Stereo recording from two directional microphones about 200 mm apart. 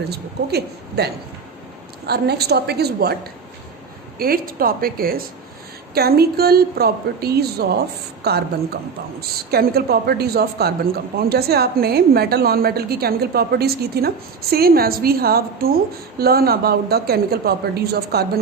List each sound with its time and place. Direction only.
0.0 s a woman's voice: 55° right (ahead or behind)
4.2 s a woman's voice: 45° right (ahead or behind)